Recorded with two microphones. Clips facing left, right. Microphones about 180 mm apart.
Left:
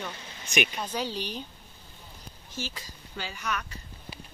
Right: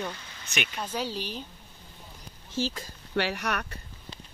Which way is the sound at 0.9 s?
5° right (ahead or behind).